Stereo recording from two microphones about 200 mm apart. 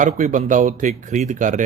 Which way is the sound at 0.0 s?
40° right (ahead or behind).